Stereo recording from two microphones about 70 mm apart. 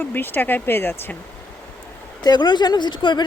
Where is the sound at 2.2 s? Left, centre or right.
Left.